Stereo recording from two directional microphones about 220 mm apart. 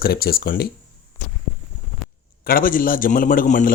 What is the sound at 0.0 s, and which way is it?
Speech, 40° left (ahead or behind).